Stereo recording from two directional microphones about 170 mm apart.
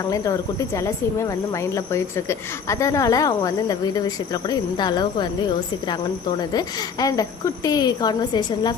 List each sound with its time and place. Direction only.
0.1 s speech: 20° left (ahead or behind)
6.5 s speech: 20° left (ahead or behind)